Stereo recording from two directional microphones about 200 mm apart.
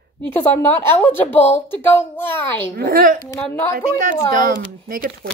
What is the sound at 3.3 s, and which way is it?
Speech, 10° left (ahead or behind).